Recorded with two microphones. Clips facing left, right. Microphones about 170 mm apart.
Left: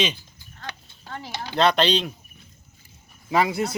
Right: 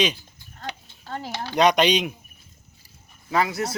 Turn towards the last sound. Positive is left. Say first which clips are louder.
# left 2 dB
turn(degrees=20)  # may be behind; listen again after turning